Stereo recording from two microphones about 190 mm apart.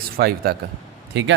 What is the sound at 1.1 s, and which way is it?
Speech, 70° right (ahead or behind).